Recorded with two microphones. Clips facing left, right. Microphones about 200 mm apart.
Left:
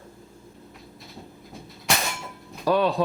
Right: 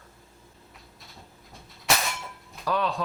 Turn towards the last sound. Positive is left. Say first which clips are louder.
# left 6 dB
turn(degrees=30)  # may be behind; listen again after turning